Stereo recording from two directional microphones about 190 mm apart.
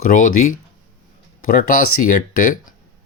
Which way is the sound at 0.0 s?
45° left (ahead or behind).